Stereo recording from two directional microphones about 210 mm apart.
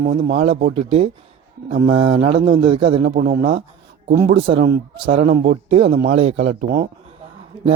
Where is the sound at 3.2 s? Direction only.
40° right (ahead or behind).